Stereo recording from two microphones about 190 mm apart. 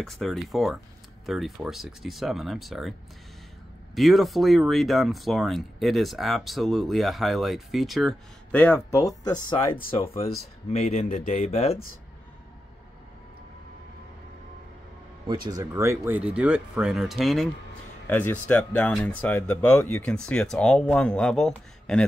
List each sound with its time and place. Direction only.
0.0 s speech: centre (ahead or behind)
3.9 s speech: centre (ahead or behind); by 9.8 s 25° left (ahead or behind)
10.7 s speech: 35° left (ahead or behind)
15.2 s speech: 20° right (ahead or behind); by 17.5 s centre (ahead or behind)
18.0 s speech: 10° left (ahead or behind)